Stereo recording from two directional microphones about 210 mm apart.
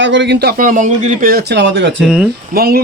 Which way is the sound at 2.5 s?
45° right (ahead or behind).